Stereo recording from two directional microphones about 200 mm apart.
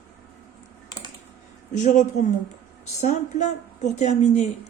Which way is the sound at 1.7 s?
35° left (ahead or behind).